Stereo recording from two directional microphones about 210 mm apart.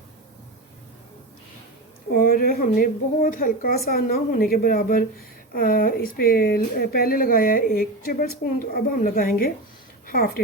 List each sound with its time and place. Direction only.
2.1 s speech: 45° left (ahead or behind)